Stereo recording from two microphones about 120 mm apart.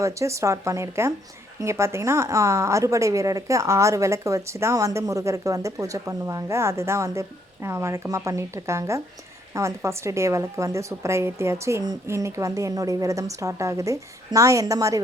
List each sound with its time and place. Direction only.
0.0 s a woman's voice: 25° right (ahead or behind)